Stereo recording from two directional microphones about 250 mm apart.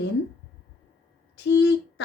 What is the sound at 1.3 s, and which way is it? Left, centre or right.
Speech, left.